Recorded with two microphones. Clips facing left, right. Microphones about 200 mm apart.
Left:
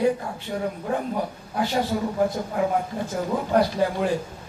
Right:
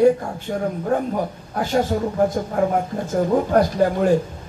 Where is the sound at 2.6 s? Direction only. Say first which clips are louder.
Right 3 dB; 50° right (ahead or behind).